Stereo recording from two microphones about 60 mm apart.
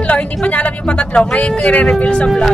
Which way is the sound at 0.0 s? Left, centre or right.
Left.